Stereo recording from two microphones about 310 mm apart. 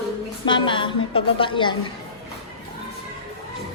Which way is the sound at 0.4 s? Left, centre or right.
Centre.